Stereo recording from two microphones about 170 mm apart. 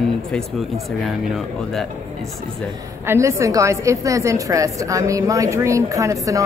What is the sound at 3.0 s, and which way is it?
A woman's voice, 15° right (ahead or behind).